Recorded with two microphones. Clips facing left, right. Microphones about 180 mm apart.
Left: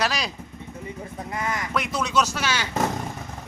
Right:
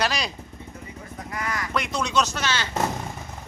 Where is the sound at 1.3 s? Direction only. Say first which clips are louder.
Left 2 dB; 25° left (ahead or behind).